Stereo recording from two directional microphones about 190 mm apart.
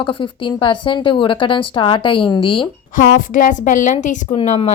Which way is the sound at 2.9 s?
45° left (ahead or behind).